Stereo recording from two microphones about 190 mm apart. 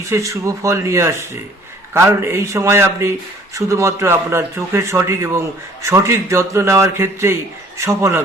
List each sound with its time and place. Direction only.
0.1 s speech: 15° right (ahead or behind)